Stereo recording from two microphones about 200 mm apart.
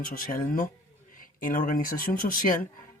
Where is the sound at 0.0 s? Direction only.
45° left (ahead or behind).